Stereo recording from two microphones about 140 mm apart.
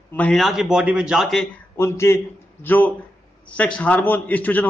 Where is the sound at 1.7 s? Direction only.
20° left (ahead or behind).